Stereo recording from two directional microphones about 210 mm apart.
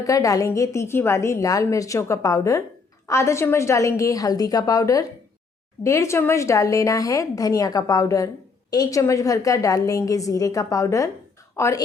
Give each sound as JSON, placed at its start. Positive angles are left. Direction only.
{"t": 0.0, "sound": "a woman's voice", "side_deg": 15}